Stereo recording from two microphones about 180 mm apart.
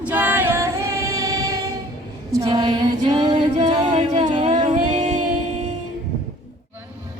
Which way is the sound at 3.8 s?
35° right (ahead or behind).